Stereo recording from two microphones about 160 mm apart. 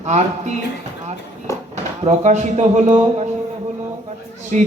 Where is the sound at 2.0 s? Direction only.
45° right (ahead or behind).